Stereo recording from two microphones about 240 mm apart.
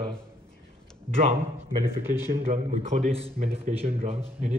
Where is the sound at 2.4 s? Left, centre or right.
Right.